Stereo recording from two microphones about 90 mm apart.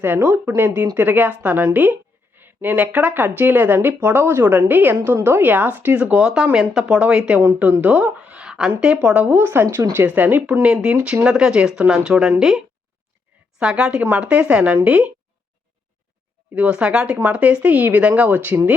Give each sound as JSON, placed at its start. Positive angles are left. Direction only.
{"t": 0.0, "sound": "a woman's voice", "side_deg": -25}
{"t": 16.6, "sound": "speech", "side_deg": -10}